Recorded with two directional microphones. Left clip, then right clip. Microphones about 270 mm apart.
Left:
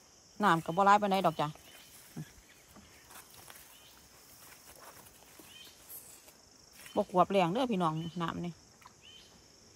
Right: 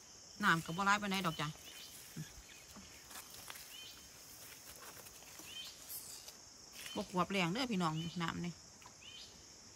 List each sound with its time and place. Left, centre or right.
0.4 s speech: centre
2.2 s a sound: centre
6.8 s speech: centre